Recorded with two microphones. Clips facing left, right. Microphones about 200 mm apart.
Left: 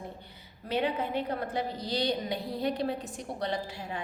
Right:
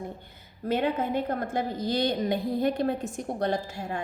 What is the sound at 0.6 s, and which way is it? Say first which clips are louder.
A woman's voice: right 4 dB; 50° right (ahead or behind).